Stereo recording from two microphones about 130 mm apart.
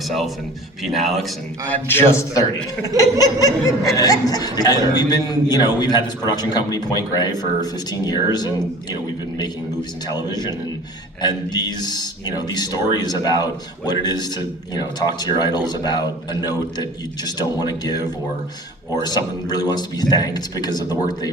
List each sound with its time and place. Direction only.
0.9 s speech: centre (ahead or behind)
1.7 s a man's voice: 15° left (ahead or behind); by 8.5 s 30° left (ahead or behind)
11.2 s speech: 30° left (ahead or behind)
17.2 s speech: 30° left (ahead or behind)
19.0 s speech: 30° left (ahead or behind)